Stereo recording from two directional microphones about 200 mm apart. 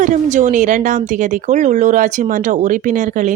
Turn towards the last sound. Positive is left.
turn(degrees=-40)  # may be behind; listen again after turning